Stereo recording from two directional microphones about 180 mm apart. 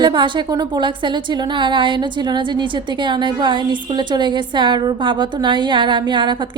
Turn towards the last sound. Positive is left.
turn(degrees=-25)  # may be behind; listen again after turning